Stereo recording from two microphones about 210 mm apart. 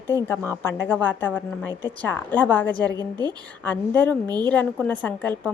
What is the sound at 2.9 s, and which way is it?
Speech, 20° right (ahead or behind).